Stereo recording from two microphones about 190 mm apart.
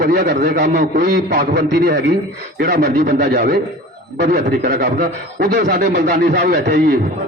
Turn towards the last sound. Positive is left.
turn(degrees=-55)  # may be behind; listen again after turning